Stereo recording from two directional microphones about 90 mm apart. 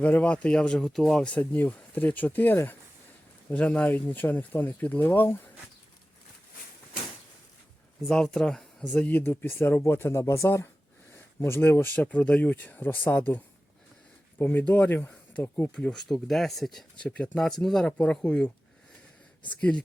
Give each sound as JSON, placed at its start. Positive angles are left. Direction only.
{"t": 0.0, "sound": "speech", "side_deg": 15}
{"t": 8.0, "sound": "speech", "side_deg": 5}
{"t": 8.9, "sound": "speech", "side_deg": 15}